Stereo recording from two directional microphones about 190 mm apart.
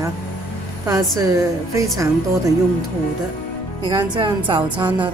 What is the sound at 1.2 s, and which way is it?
Speech, 15° right (ahead or behind).